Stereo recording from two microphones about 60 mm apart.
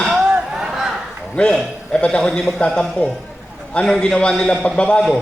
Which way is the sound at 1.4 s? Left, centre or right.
Centre.